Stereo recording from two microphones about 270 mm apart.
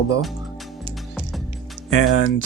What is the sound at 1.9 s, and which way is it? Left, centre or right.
Speech, left.